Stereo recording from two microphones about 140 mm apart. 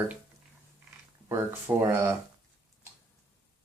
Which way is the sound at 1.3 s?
20° right (ahead or behind).